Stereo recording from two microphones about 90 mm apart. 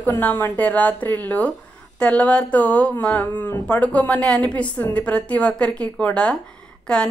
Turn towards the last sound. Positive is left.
turn(degrees=10)  # may be behind; listen again after turning